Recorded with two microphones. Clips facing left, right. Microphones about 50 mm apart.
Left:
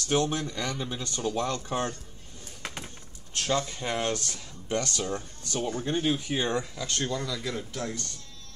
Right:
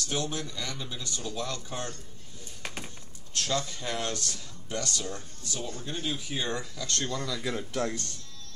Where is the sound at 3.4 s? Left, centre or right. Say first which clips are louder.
Left 3 dB; left.